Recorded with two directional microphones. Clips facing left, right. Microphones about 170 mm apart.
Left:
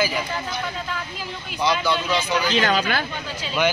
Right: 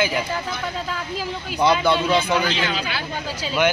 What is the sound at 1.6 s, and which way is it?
Speech, 55° right (ahead or behind).